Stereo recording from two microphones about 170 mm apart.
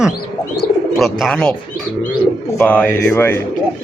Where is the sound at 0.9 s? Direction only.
Centre (ahead or behind).